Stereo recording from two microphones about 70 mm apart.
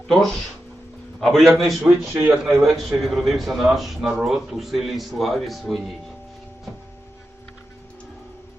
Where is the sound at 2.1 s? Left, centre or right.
Right.